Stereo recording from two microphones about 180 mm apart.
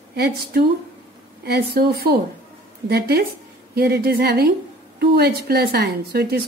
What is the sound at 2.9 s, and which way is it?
A woman's voice, 60° right (ahead or behind).